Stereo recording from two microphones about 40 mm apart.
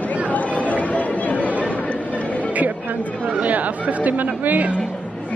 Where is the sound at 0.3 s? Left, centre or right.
Left.